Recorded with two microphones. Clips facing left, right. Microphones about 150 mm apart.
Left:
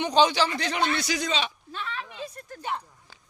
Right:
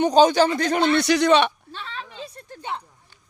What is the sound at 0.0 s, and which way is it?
Speech, 45° right (ahead or behind).